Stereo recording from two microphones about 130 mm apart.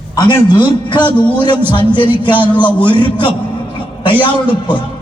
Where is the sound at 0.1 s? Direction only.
30° left (ahead or behind).